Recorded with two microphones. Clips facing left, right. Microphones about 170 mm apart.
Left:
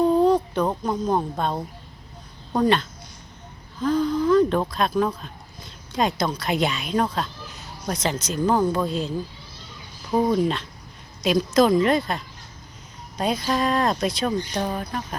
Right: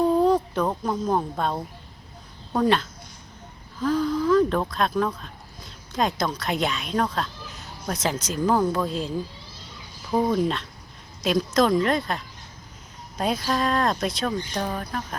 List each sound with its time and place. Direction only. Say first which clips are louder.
0.0 s speech: left 2 dB; centre (ahead or behind)
3.8 s speech: left 2 dB; centre (ahead or behind)